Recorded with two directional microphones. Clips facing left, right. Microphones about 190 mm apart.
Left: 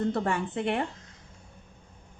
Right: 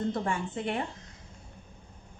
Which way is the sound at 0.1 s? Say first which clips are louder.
Left 3 dB; 65° left (ahead or behind).